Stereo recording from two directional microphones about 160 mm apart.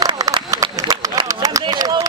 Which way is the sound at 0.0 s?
25° right (ahead or behind).